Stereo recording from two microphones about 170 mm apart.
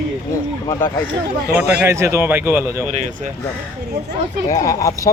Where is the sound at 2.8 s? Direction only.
45° right (ahead or behind).